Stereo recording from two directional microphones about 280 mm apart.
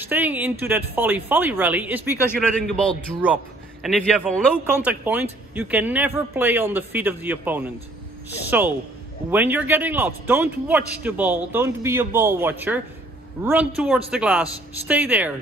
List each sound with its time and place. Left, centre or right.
0.0 s a man's voice: centre
2.1 s a man's voice: centre